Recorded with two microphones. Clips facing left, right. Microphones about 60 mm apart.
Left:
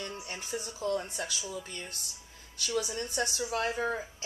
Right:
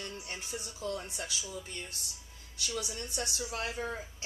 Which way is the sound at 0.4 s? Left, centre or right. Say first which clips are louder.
Left 8 dB; left.